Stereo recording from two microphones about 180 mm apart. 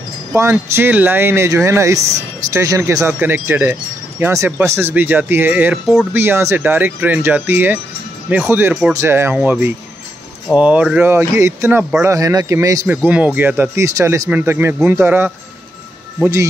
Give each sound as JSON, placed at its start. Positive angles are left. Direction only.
{"t": 0.3, "sound": "speech", "side_deg": -15}